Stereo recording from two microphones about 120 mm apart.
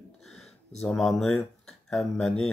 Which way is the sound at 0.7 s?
Centre (ahead or behind).